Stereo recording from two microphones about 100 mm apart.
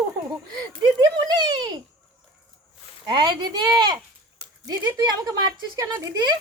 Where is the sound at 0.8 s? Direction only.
40° right (ahead or behind).